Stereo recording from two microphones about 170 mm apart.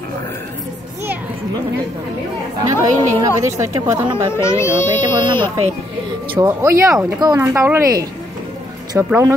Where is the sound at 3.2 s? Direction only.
15° right (ahead or behind).